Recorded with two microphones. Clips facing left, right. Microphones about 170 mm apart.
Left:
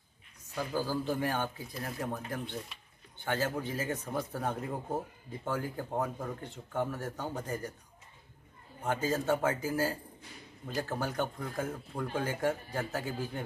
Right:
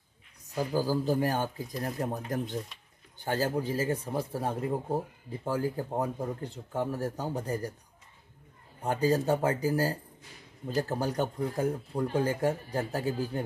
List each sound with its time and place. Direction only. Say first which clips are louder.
0.6 s speech: right 5 dB; 40° right (ahead or behind)
4.6 s speech: right 5 dB; 10° right (ahead or behind)
5.4 s speech: right 5 dB; 35° right (ahead or behind)
8.8 s speech: right 4 dB; 35° right (ahead or behind)